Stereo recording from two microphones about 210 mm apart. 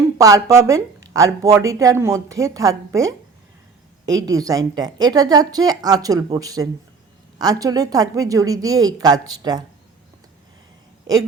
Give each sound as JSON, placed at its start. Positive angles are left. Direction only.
{"t": 0.2, "sound": "speech", "side_deg": -15}